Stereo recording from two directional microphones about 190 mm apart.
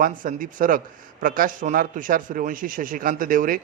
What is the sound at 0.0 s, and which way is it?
A man's voice, 45° right (ahead or behind).